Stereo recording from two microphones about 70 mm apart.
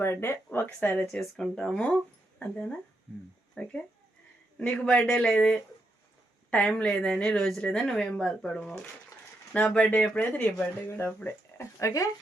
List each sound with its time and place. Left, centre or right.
0.0 s speech: left
1.0 s speech: centre
6.7 s speech: centre; by 11.6 s left
11.8 s speech: left